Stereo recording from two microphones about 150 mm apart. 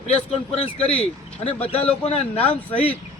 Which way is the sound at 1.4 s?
40° left (ahead or behind).